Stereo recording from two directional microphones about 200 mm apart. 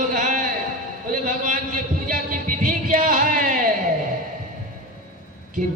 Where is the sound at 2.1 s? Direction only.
45° right (ahead or behind).